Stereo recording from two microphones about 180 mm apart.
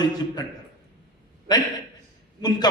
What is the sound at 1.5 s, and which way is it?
A man's voice, 25° left (ahead or behind).